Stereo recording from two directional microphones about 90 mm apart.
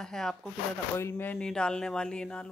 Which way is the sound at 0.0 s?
5° left (ahead or behind).